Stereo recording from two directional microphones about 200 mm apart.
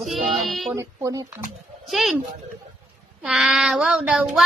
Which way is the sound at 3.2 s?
Centre (ahead or behind).